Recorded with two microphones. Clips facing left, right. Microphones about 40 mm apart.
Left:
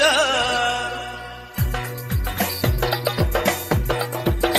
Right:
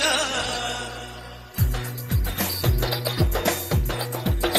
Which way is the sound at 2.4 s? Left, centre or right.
Left.